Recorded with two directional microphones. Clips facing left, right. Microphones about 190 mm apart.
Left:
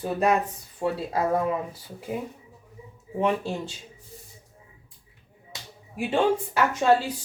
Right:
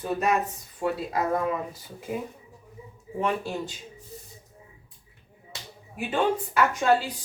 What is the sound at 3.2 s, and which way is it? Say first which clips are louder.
Speech: left 3 dB; 20° left (ahead or behind).